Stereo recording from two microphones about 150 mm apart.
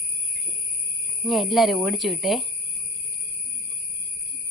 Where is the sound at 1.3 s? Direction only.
Centre (ahead or behind).